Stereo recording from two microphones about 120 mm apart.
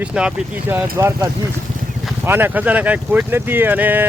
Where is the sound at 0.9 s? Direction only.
25° right (ahead or behind).